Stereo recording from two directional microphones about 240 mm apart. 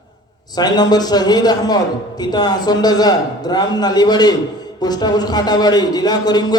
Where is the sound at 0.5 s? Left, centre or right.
Centre.